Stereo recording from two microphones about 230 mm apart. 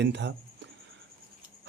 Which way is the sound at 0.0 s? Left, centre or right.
Right.